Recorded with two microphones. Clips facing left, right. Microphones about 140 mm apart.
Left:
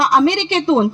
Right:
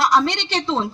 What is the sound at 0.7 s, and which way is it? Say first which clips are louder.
Speech: left 10 dB; 15° left (ahead or behind).